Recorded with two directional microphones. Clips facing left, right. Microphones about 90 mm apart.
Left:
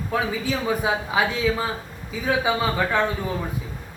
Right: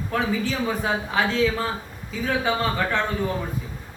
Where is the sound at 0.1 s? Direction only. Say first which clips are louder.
Even; 10° left (ahead or behind).